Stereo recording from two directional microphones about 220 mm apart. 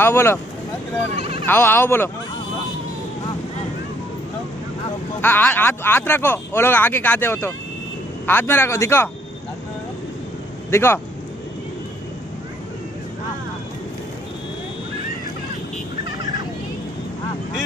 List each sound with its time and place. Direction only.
0.0 s speech: 10° left (ahead or behind)
1.1 s speech: 25° right (ahead or behind)
1.4 s speech: 10° left (ahead or behind)
5.2 s speech: 10° left (ahead or behind)
10.7 s speech: 10° left (ahead or behind)